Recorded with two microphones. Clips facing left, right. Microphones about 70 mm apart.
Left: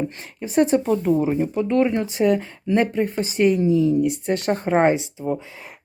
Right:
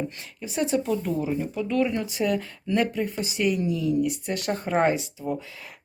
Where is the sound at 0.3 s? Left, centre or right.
Left.